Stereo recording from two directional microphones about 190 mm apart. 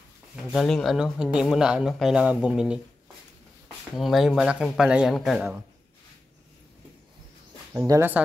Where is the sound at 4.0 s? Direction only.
Centre (ahead or behind).